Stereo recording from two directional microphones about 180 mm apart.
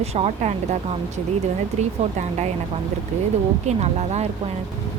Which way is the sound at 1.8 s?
40° right (ahead or behind).